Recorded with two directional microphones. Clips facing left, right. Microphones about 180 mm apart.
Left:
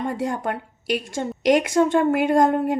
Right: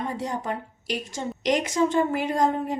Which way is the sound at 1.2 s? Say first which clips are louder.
Left 6 dB; 50° left (ahead or behind).